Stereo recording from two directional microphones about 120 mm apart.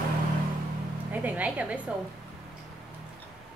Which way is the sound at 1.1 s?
15° right (ahead or behind).